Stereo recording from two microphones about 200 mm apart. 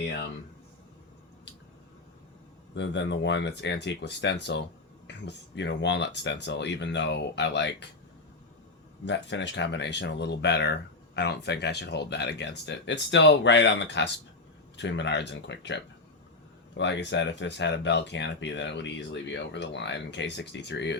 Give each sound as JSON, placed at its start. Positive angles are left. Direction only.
{"t": 2.7, "sound": "speech", "side_deg": 60}
{"t": 9.0, "sound": "speech", "side_deg": 60}